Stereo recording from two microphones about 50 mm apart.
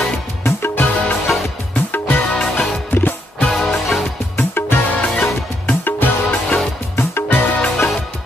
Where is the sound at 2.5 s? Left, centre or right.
Left.